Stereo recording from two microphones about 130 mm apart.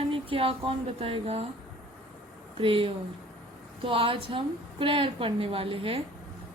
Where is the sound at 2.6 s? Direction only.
45° right (ahead or behind).